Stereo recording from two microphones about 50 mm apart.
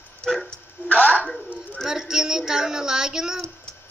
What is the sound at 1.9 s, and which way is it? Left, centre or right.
Speech, centre.